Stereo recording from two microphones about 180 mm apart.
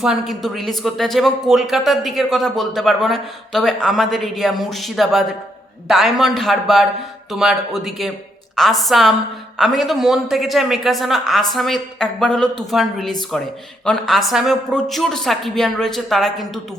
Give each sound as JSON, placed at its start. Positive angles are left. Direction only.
{"t": 0.0, "sound": "speech", "side_deg": 0}